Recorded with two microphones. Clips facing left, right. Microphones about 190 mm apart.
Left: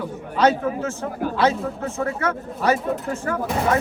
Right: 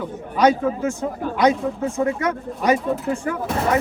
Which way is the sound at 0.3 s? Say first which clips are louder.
Right 2 dB; 10° right (ahead or behind).